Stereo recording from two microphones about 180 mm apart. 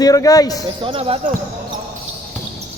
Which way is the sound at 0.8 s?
30° right (ahead or behind).